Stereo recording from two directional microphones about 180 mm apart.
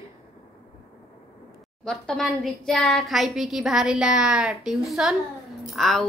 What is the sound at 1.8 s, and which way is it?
A woman's voice, 5° left (ahead or behind).